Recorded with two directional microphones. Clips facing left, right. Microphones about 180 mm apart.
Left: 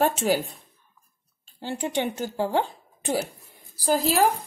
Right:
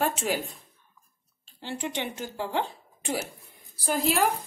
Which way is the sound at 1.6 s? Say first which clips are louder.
Left 5 dB; 40° left (ahead or behind).